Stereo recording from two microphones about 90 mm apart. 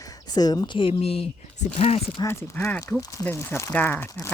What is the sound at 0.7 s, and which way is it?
Speech, 85° left.